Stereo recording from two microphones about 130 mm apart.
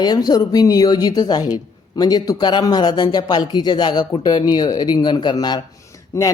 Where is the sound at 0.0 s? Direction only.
30° left (ahead or behind).